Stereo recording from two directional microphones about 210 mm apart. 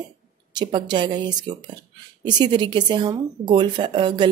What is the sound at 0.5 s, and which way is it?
A woman's voice, 20° right (ahead or behind).